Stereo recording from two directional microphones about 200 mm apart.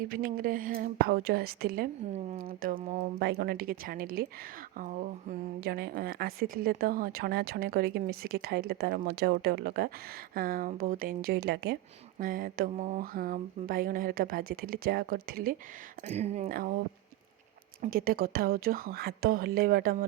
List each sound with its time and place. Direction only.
0.1 s mantra: 45° right (ahead or behind)
3.2 s mantra: 55° right (ahead or behind)
16.0 s speech: 35° right (ahead or behind)
16.5 s mantra: 45° right (ahead or behind)
17.8 s mantra: 45° right (ahead or behind)